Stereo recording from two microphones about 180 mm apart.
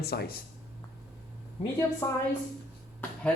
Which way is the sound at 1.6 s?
35° left (ahead or behind).